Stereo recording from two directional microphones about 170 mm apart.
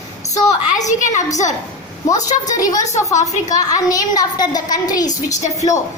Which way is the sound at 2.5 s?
20° left (ahead or behind).